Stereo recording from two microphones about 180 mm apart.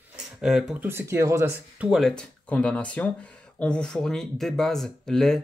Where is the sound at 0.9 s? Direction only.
15° right (ahead or behind).